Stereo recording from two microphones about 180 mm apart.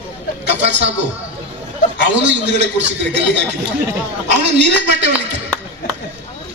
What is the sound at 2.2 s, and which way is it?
Speech, 80° right.